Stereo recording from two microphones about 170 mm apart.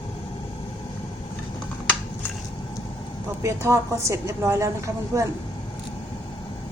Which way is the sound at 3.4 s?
15° right (ahead or behind).